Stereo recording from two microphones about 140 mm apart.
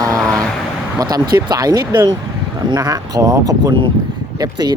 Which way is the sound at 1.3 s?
25° right (ahead or behind).